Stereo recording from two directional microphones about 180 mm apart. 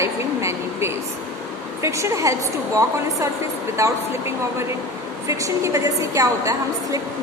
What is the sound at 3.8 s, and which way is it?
Speech, 15° right (ahead or behind).